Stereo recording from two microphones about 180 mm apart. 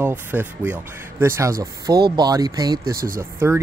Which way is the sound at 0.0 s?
10° right (ahead or behind).